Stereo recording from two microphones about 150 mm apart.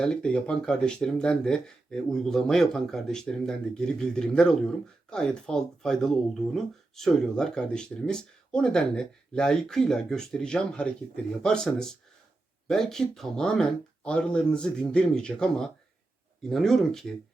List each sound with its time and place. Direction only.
0.0 s speech: 5° left (ahead or behind)